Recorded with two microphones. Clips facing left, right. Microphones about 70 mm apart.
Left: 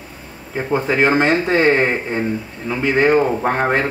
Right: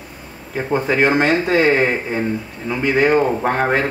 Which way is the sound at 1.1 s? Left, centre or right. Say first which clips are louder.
Even; centre.